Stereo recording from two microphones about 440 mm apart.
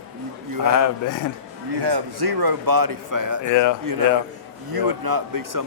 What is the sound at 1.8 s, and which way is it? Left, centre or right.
A man's voice, right.